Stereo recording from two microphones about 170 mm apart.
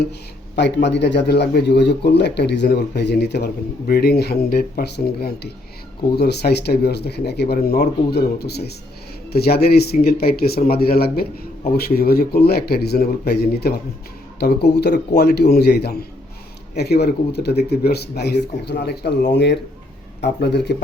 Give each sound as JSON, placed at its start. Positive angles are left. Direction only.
{"t": 0.5, "sound": "a man's voice", "side_deg": 90}
{"t": 20.2, "sound": "speech", "side_deg": 80}